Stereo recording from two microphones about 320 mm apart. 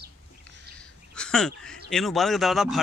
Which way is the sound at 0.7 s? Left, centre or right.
Centre.